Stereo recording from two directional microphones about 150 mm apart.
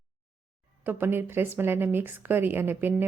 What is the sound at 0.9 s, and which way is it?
A woman's voice, 15° right (ahead or behind).